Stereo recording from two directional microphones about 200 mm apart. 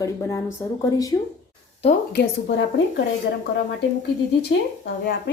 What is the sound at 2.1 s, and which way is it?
Speech, 60° left (ahead or behind).